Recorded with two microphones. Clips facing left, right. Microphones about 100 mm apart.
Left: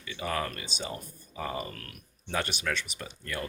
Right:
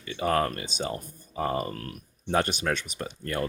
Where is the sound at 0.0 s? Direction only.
40° right (ahead or behind).